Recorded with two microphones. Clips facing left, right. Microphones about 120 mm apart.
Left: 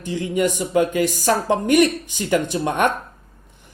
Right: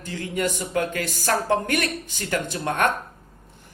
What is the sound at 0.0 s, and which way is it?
Speech, 20° left (ahead or behind).